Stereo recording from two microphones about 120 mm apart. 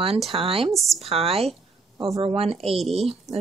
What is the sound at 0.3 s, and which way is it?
A woman's voice, 50° right (ahead or behind).